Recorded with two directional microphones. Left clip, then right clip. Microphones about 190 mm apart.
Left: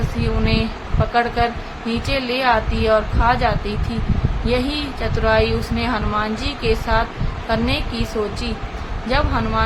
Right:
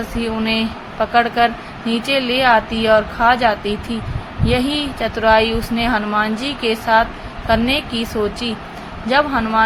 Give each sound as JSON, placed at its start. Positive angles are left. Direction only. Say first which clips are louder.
{"t": 0.2, "sound": "a woman's voice", "louder": "right 2 dB", "side_deg": -20}